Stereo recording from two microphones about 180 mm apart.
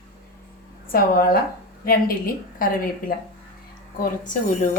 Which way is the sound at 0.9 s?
55° left (ahead or behind).